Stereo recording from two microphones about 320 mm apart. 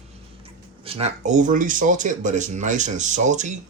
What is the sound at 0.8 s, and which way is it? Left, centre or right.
Speech, centre.